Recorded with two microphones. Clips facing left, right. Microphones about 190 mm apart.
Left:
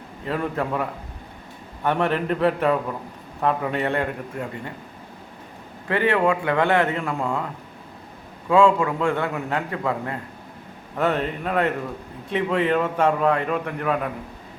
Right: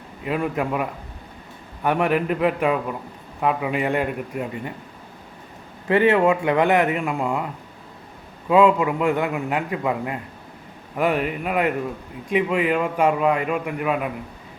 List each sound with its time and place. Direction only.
0.3 s a man's voice: 10° right (ahead or behind)
5.9 s a man's voice: 20° right (ahead or behind)
8.4 s a man's voice: 20° right (ahead or behind)